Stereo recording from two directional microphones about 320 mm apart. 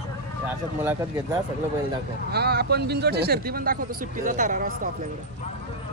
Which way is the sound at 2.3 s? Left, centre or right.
Right.